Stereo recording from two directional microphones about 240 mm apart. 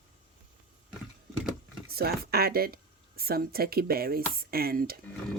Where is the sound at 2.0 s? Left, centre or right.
Right.